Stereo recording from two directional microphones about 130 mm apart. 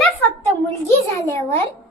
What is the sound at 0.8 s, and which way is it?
Speech, 20° left (ahead or behind).